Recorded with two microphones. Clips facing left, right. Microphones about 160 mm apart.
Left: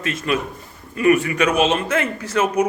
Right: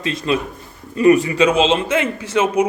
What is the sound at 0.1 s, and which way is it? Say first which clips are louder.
A man's voice: right 2 dB; 35° right (ahead or behind).